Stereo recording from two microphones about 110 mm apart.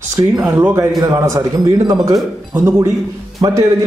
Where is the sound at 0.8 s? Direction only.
30° right (ahead or behind).